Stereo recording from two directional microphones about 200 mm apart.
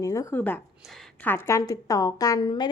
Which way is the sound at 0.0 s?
15° left (ahead or behind).